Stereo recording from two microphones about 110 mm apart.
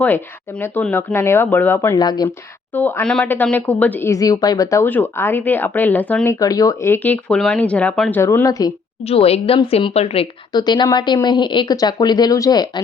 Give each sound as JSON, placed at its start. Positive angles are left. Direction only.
{"t": 0.6, "sound": "speech", "side_deg": 15}
{"t": 2.0, "sound": "speech", "side_deg": 40}
{"t": 2.7, "sound": "speech", "side_deg": 15}
{"t": 3.0, "sound": "speech", "side_deg": 5}
{"t": 4.1, "sound": "speech", "side_deg": 35}
{"t": 4.9, "sound": "speech", "side_deg": 20}
{"t": 6.4, "sound": "speech", "side_deg": 35}
{"t": 6.9, "sound": "speech", "side_deg": 15}
{"t": 8.1, "sound": "speech", "side_deg": 20}
{"t": 9.0, "sound": "a woman's voice", "side_deg": 65}
{"t": 10.5, "sound": "speech", "side_deg": 40}